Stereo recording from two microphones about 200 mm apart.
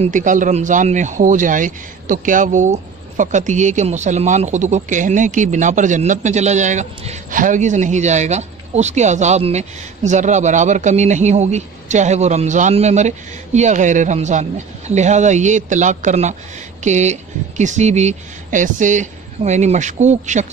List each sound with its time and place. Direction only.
0.0 s speech: 40° right (ahead or behind)